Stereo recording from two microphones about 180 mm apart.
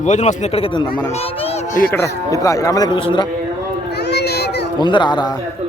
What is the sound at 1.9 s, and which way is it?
Speech, 15° left (ahead or behind).